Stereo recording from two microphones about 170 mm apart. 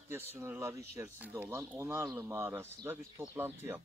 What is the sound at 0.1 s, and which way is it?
Speech, 15° right (ahead or behind).